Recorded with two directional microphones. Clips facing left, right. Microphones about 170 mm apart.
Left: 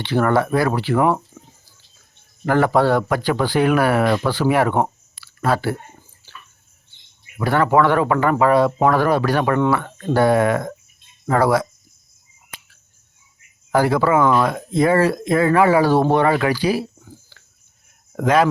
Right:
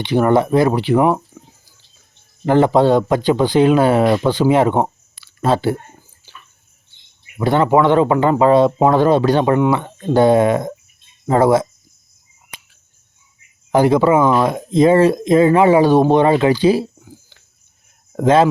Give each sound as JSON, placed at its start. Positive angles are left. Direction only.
{"t": 0.0, "sound": "speech", "side_deg": -20}
{"t": 2.4, "sound": "speech", "side_deg": -20}
{"t": 6.3, "sound": "bathtub", "side_deg": -15}
{"t": 7.3, "sound": "speech", "side_deg": -20}
{"t": 13.7, "sound": "speech", "side_deg": -20}
{"t": 17.0, "sound": "a sound", "side_deg": -15}
{"t": 18.2, "sound": "speech", "side_deg": -25}